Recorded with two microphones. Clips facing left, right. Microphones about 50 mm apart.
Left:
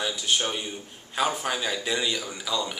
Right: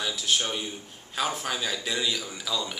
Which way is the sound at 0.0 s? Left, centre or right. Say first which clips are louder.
Left 1 dB; centre.